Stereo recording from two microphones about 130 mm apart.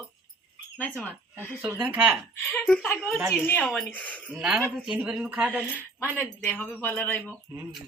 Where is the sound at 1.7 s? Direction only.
15° right (ahead or behind).